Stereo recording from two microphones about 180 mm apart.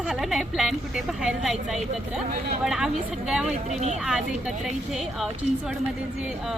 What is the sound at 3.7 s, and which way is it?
Speech, 40° right (ahead or behind).